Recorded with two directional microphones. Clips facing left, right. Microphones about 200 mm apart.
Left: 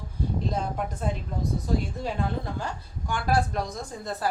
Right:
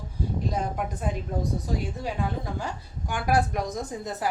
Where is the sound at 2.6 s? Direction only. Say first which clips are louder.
Even; 15° right (ahead or behind).